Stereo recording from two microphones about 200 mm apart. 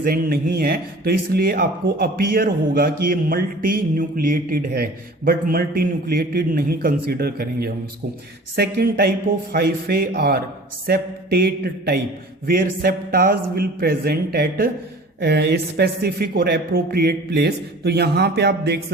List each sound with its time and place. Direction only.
0.0 s speech: 50° right (ahead or behind)